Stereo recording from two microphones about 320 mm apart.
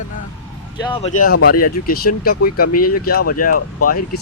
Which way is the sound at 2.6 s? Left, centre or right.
Left.